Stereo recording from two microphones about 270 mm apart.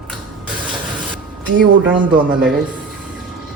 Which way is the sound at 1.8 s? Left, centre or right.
Centre.